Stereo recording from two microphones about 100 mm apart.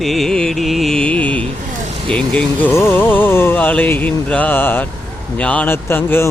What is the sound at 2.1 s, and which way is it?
Speech, 10° left (ahead or behind).